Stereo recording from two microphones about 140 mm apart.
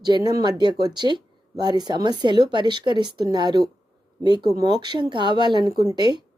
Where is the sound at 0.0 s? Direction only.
30° right (ahead or behind).